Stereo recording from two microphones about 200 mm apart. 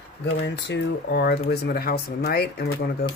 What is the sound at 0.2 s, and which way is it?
Speech, 60° left (ahead or behind).